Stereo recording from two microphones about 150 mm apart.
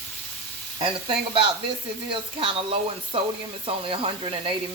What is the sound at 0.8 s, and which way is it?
Speech, 35° right (ahead or behind).